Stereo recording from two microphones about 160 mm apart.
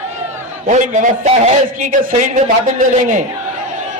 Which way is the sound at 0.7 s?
50° right (ahead or behind).